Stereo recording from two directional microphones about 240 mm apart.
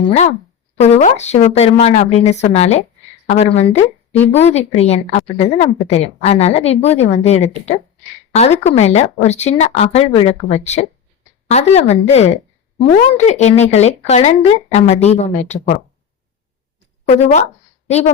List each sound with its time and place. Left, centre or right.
0.8 s a woman's voice: left
17.1 s a woman's voice: left